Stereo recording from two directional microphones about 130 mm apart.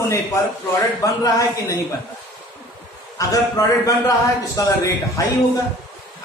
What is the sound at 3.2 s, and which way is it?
A man's voice, 25° left (ahead or behind).